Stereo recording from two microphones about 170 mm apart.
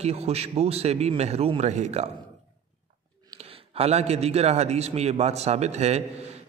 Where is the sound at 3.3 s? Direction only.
35° right (ahead or behind).